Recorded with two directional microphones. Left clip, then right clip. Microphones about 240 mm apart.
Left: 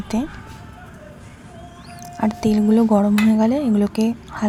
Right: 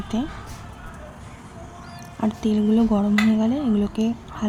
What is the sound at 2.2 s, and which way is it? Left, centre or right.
A woman's voice, centre.